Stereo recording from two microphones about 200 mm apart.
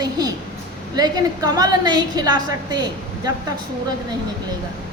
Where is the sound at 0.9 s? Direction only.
20° right (ahead or behind).